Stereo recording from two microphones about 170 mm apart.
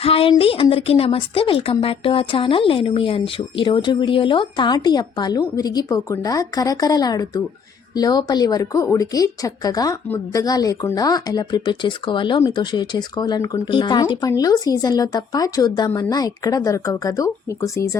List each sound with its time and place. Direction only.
0.0 s a woman's voice: 35° left (ahead or behind); by 17.9 s 15° left (ahead or behind)